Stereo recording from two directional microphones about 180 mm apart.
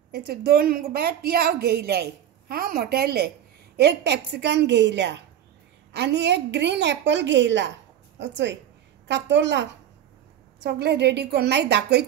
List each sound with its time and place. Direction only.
0.1 s a woman's voice: 60° right (ahead or behind); by 9.7 s 80° right
10.6 s a woman's voice: 70° right (ahead or behind)